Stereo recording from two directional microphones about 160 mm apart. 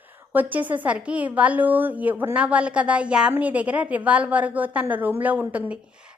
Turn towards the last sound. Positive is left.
turn(degrees=-10)  # may be behind; listen again after turning